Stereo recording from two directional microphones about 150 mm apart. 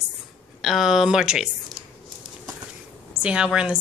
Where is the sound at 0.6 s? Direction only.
Centre (ahead or behind).